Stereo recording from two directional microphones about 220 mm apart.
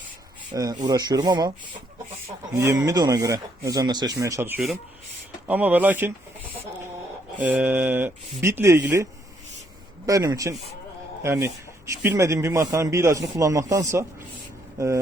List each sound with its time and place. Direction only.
0.5 s speech: 15° right (ahead or behind)
2.6 s speech: 15° right (ahead or behind)
10.1 s speech: 15° right (ahead or behind)